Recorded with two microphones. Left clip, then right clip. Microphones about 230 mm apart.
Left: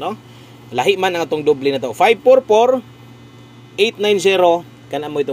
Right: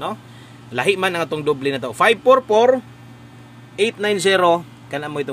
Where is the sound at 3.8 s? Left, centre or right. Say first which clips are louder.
Left 4 dB; centre.